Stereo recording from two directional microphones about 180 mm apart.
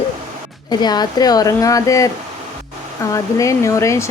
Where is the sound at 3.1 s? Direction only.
15° left (ahead or behind).